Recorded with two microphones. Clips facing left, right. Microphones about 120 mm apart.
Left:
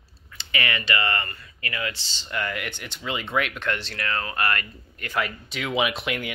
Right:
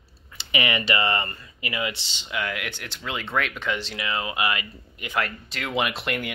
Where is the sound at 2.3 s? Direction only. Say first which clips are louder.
Even; centre (ahead or behind).